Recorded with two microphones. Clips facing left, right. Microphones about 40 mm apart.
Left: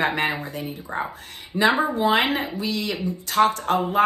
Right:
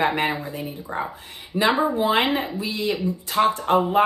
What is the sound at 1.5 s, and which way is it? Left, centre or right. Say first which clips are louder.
Speech: left 1 dB; right.